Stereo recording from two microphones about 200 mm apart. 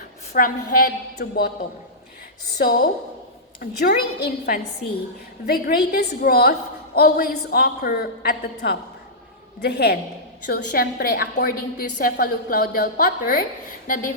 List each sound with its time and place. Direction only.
0.3 s a woman's voice: 45° left (ahead or behind)
2.6 s a woman's voice: 50° left (ahead or behind)